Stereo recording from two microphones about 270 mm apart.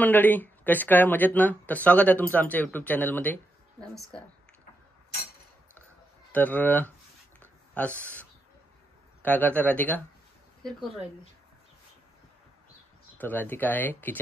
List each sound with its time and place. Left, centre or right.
0.0 s speech: centre
6.3 s speech: centre
13.2 s speech: centre